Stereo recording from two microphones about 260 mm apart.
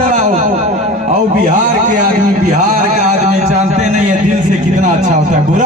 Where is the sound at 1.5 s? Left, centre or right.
Right.